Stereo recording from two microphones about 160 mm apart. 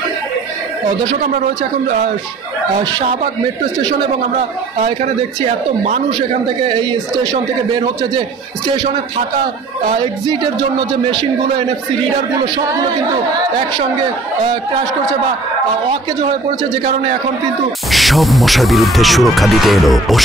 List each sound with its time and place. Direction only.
4.7 s speech: 40° right (ahead or behind)
6.7 s speech: 30° right (ahead or behind)
9.9 s speech: 30° right (ahead or behind)
17.9 s speech: centre (ahead or behind)